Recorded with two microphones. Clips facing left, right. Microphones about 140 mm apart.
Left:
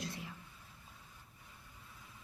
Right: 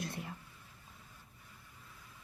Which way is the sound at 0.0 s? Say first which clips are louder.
Right 3 dB; 55° right (ahead or behind).